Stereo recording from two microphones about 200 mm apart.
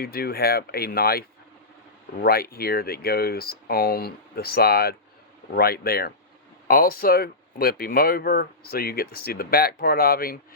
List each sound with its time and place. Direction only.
0.0 s speech: 50° left (ahead or behind)
2.2 s speech: 50° left (ahead or behind)